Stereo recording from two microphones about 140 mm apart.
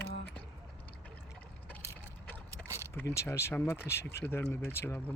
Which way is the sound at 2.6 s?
5° right (ahead or behind).